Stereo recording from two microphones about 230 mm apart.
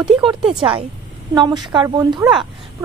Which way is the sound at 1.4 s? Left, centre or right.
Centre.